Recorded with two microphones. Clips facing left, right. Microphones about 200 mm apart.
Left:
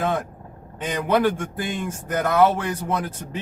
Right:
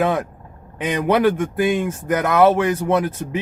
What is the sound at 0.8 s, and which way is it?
Speech, 75° right (ahead or behind).